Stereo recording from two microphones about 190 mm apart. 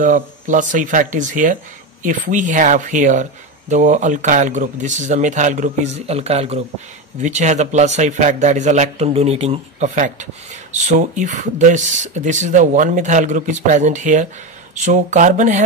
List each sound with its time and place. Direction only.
0.0 s speech: 40° right (ahead or behind)